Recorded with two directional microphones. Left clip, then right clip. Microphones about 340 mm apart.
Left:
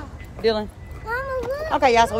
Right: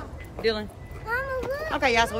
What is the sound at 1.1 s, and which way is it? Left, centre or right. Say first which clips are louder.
Children playing: left 3 dB; centre.